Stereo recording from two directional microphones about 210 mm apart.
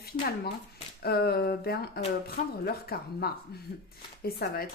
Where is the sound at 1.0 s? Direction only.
50° left (ahead or behind).